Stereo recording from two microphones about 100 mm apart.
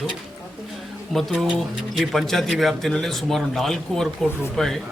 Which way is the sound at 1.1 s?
Centre (ahead or behind).